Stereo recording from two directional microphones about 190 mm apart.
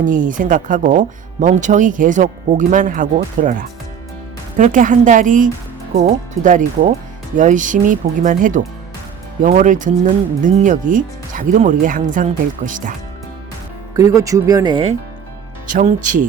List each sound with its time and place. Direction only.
0.0 s speech: 45° right (ahead or behind)
4.5 s speech: 45° right (ahead or behind)
13.9 s speech: 15° right (ahead or behind)
15.7 s speech: 45° right (ahead or behind)